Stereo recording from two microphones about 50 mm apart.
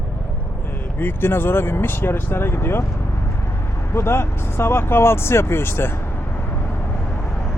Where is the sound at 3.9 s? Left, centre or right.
Left.